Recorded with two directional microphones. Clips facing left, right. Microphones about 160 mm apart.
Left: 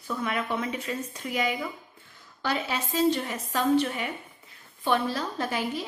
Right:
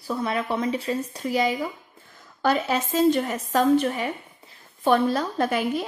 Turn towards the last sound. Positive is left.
turn(degrees=-55)  # may be behind; listen again after turning